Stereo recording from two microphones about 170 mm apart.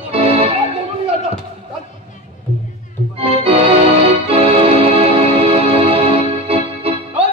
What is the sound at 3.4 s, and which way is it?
Organ, 35° right (ahead or behind).